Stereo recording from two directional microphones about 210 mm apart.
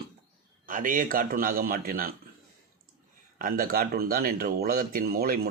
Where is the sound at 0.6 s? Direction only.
40° right (ahead or behind).